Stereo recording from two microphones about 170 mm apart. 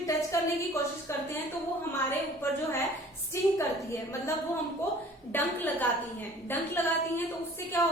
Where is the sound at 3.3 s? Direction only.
15° left (ahead or behind).